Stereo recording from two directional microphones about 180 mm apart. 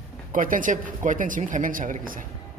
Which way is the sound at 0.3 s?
50° right (ahead or behind).